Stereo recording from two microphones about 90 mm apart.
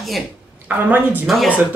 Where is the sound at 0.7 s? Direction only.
20° right (ahead or behind).